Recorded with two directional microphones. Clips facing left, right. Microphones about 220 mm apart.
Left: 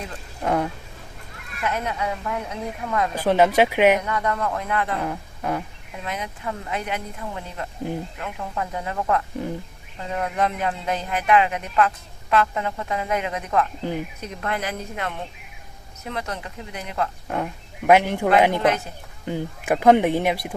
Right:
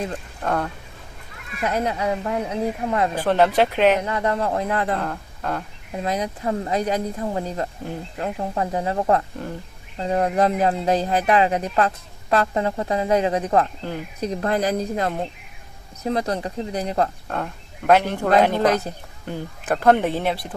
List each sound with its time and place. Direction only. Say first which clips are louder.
0.4 s speech: left 2 dB; 10° left (ahead or behind)
1.6 s speech: right 4 dB; 35° right (ahead or behind)
3.2 s speech: left 1 dB; 10° left (ahead or behind)
4.0 s speech: right 2 dB; 30° right (ahead or behind)
4.9 s speech: even; 10° left (ahead or behind)
5.9 s speech: right 7 dB; 35° right (ahead or behind)
17.2 s speech: left 1 dB; 10° left (ahead or behind)